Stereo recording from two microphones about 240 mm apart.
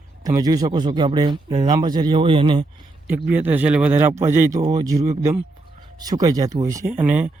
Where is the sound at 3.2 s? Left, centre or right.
Centre.